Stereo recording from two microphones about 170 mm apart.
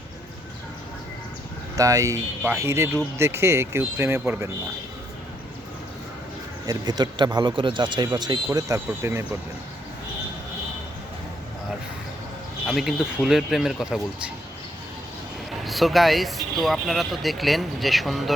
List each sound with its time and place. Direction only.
1.7 s speech: 20° right (ahead or behind)
6.7 s speech: 25° right (ahead or behind)
12.6 s speech: centre (ahead or behind)
15.6 s speech: centre (ahead or behind)